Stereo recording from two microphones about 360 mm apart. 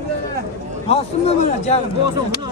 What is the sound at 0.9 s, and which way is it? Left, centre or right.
Speech, centre.